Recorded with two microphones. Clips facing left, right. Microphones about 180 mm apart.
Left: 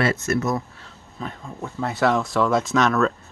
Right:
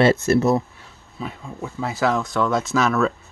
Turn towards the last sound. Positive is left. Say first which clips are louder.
# even
turn(degrees=-5)  # may be behind; listen again after turning